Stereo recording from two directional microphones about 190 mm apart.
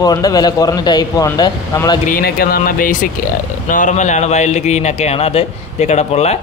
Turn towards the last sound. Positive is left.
turn(degrees=35)  # may be behind; listen again after turning